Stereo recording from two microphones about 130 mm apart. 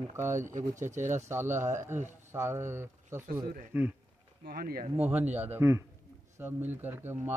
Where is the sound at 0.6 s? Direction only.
70° right (ahead or behind).